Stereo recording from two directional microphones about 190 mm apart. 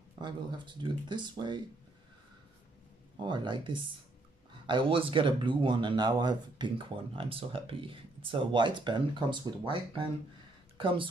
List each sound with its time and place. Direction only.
0.2 s speech: 25° right (ahead or behind)
3.2 s speech: 25° right (ahead or behind)